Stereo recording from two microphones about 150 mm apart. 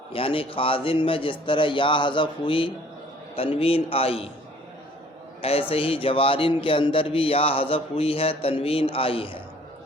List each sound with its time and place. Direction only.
0.1 s a man's voice: 40° left (ahead or behind)
5.4 s a man's voice: 40° left (ahead or behind)